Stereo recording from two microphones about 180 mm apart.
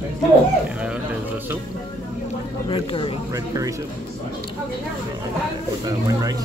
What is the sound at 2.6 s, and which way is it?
Speech, 30° left (ahead or behind).